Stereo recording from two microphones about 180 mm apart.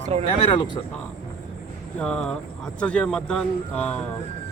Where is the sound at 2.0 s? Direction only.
5° left (ahead or behind).